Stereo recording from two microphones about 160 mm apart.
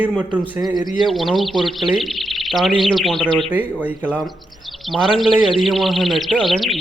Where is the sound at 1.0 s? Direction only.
Centre (ahead or behind).